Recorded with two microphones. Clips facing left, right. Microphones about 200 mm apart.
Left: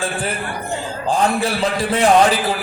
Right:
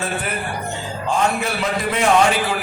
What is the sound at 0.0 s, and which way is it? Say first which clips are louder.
A man's voice: left 1 dB; 30° left (ahead or behind).